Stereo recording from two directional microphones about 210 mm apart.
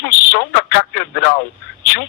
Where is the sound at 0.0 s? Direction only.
50° left (ahead or behind).